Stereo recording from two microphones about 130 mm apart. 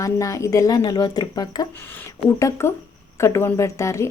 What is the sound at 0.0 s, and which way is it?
A woman's voice, 25° left (ahead or behind).